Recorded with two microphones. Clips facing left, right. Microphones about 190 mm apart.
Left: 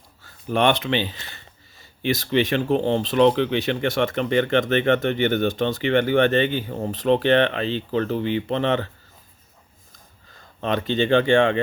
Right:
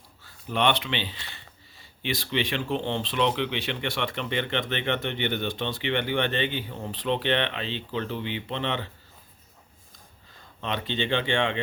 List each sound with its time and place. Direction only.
0.4 s speech: 45° left (ahead or behind)
10.6 s speech: 45° left (ahead or behind)